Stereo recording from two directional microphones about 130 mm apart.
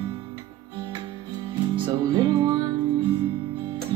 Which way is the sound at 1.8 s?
30° right (ahead or behind).